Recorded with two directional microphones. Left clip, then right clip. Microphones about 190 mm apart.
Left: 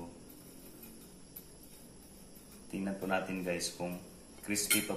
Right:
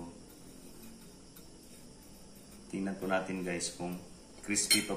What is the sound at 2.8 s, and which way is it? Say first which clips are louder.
Speech: right 1 dB; 10° left (ahead or behind).